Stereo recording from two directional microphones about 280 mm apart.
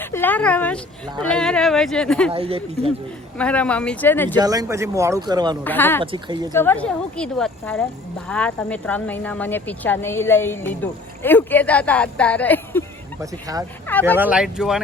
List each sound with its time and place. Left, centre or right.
0.0 s speech: centre
2.3 s speech: centre
3.3 s speech: centre
4.4 s speech: centre
5.6 s speech: centre
6.0 s speech: centre
6.5 s speech: centre
14.2 s speech: centre